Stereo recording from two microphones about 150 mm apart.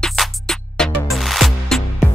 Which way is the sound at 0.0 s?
Centre (ahead or behind).